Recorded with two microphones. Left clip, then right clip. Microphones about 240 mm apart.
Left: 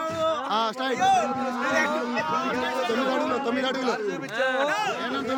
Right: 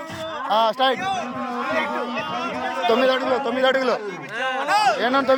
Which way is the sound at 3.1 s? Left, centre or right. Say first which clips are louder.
Right 5 dB; centre.